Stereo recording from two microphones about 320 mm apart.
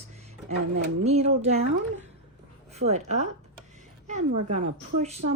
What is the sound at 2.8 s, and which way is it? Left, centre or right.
Speech, right.